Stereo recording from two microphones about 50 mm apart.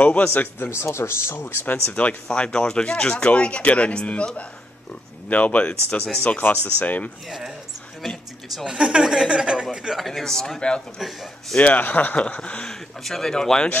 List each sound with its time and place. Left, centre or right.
0.0 s speech: left
0.3 s speech: left
0.7 s speech: left
2.2 s speech: centre
5.3 s speech: left
7.2 s speech: centre
8.6 s speech: centre
9.9 s speech: centre
11.0 s a man's voice: centre
11.6 s speech: left
13.0 s speech: centre